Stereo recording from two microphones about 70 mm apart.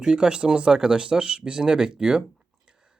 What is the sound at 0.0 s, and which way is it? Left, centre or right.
Speech, centre.